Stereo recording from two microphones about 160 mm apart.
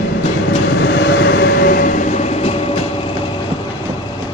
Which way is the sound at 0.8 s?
90° left.